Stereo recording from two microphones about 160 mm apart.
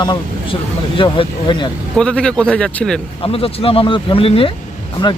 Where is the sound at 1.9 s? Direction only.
5° left (ahead or behind).